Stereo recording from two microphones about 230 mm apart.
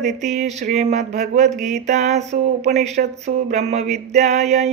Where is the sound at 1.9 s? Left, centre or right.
Right.